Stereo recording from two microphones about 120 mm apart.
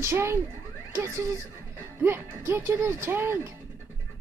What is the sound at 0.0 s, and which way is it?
Speech, 20° right (ahead or behind).